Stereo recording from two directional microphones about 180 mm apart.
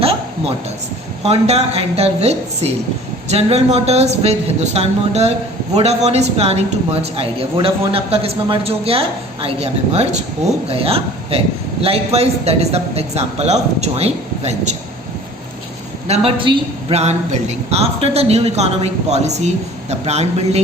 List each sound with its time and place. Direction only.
0.0 s a sound: 35° right (ahead or behind)
1.2 s a man's voice: 35° right (ahead or behind)
16.0 s a man's voice: 35° right (ahead or behind)